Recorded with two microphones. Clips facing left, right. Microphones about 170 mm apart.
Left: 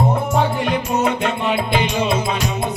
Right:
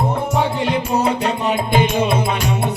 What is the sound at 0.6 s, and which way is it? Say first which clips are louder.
Music: right 1 dB; 35° right (ahead or behind).